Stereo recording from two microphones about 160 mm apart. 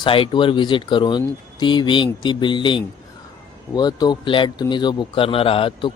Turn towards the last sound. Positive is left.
turn(degrees=35)  # may be behind; listen again after turning